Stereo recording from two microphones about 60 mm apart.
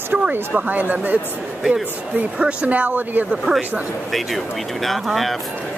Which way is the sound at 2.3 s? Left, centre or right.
Centre.